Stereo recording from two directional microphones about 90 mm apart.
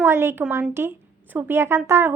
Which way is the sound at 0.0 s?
25° right (ahead or behind).